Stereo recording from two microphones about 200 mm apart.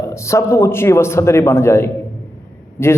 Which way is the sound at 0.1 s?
15° left (ahead or behind).